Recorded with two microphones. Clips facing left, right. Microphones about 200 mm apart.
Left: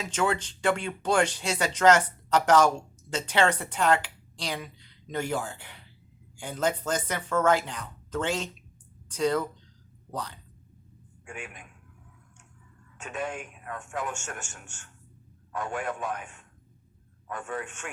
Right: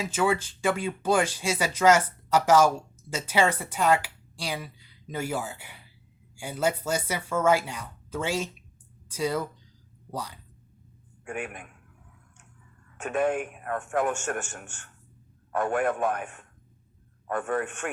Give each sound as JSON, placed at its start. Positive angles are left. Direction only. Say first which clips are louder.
{"t": 0.0, "sound": "speech", "louder": "right 2 dB", "side_deg": -10}
{"t": 11.3, "sound": "a man's voice", "louder": "right 7 dB", "side_deg": -55}
{"t": 13.0, "sound": "a man's voice", "louder": "right 8 dB", "side_deg": -55}